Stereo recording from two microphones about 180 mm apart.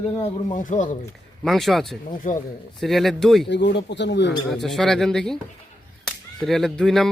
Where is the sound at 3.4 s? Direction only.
70° left (ahead or behind).